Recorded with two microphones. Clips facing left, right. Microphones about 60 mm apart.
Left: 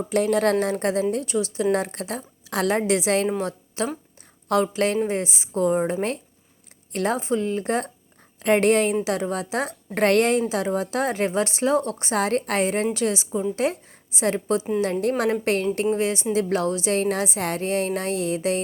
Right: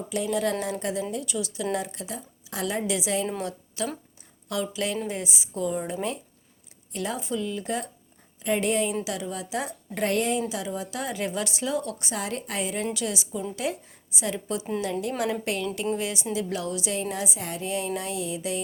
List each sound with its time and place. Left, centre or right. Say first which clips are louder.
0.1 s a woman's voice: left 6 dB; left
1.1 s a woman's voice: left 6 dB; left
1.7 s a woman's voice: left 6 dB; left
3.8 s a woman's voice: left 4 dB; left
8.4 s a woman's voice: left 7 dB; left
9.0 s a woman's voice: left 7 dB; left
10.5 s a woman's voice: left 8 dB; left
17.0 s a woman's voice: left 7 dB; left